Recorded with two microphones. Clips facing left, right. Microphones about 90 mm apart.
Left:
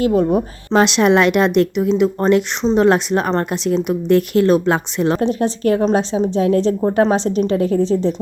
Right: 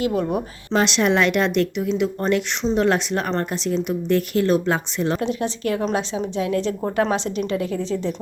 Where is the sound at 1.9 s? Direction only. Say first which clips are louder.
Left 6 dB; 40° left (ahead or behind).